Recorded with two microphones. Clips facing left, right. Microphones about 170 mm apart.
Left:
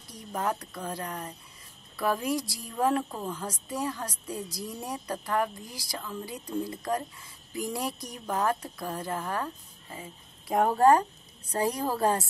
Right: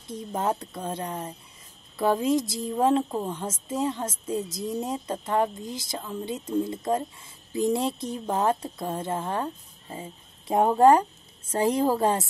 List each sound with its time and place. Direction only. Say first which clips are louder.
0.1 s a woman's voice: right 4 dB; 25° right (ahead or behind)